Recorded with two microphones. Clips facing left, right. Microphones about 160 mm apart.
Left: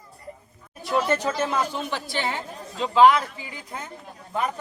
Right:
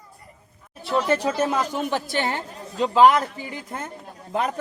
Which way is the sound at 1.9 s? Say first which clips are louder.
Right 3 dB; 50° right (ahead or behind).